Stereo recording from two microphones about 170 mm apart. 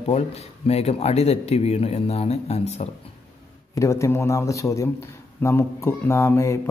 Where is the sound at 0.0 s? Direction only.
35° left (ahead or behind).